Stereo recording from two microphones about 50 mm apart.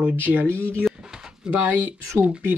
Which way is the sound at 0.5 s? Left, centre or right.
Left.